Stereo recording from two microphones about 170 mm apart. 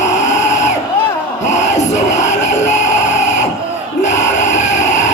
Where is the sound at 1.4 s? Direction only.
45° left (ahead or behind).